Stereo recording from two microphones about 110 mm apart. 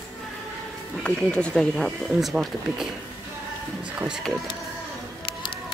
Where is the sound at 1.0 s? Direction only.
10° left (ahead or behind).